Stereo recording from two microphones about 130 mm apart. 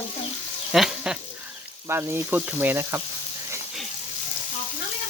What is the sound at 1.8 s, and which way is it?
Frying, 15° right (ahead or behind).